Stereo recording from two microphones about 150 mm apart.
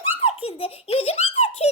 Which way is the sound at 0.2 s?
40° left (ahead or behind).